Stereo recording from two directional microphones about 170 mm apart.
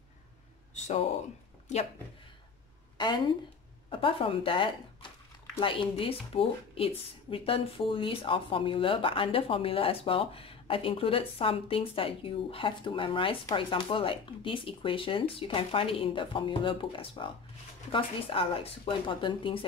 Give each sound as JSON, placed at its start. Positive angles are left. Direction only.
{"t": 0.7, "sound": "a sound", "side_deg": 40}
{"t": 1.7, "sound": "speech", "side_deg": 45}
{"t": 3.0, "sound": "a woman's voice", "side_deg": 25}